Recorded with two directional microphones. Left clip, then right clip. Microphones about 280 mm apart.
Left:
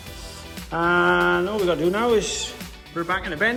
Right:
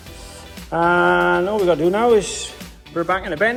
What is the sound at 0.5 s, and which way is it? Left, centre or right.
Speech, centre.